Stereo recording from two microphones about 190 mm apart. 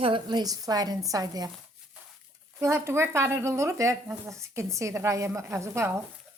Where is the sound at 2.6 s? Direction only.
15° right (ahead or behind).